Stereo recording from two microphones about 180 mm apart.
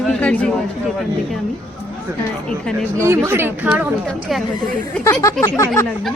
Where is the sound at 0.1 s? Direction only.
5° left (ahead or behind).